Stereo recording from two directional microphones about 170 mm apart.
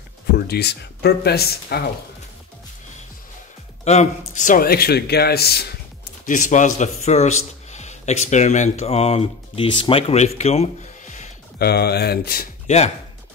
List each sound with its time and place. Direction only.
0.5 s speech: 75° left (ahead or behind)
3.8 s speech: 40° left (ahead or behind); by 5.7 s 70° left (ahead or behind)
6.2 s speech: 50° left (ahead or behind)
11.5 s speech: 70° left (ahead or behind)
12.6 s speech: 40° left (ahead or behind)